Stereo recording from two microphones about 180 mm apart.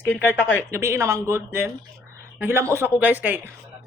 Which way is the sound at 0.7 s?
15° right (ahead or behind).